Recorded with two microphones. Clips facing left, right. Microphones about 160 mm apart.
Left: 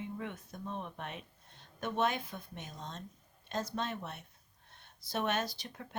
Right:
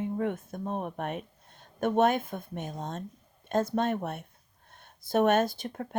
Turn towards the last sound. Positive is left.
turn(degrees=-50)  # may be behind; listen again after turning